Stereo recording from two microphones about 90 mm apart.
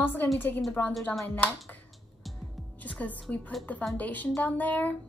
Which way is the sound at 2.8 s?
15° left (ahead or behind).